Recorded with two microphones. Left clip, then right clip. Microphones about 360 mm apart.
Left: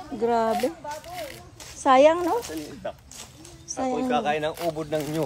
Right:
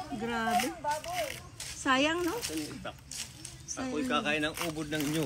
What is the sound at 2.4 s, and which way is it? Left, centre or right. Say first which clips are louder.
Speech: left 4 dB; left.